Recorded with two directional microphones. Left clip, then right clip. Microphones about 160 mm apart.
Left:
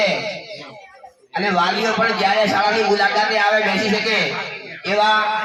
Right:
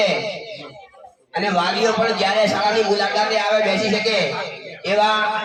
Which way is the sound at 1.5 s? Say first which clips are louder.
Even; 30° right (ahead or behind).